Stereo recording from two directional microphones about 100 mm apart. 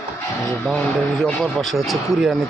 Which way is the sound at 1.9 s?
Centre (ahead or behind).